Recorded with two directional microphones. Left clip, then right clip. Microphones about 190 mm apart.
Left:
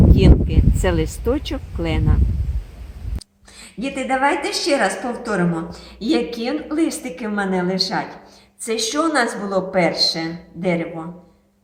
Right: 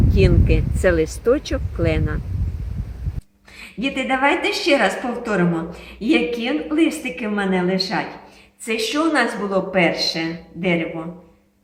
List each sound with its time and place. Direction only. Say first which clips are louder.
0.2 s speech: even; 55° left (ahead or behind)
3.6 s a woman's voice: right 2 dB; centre (ahead or behind)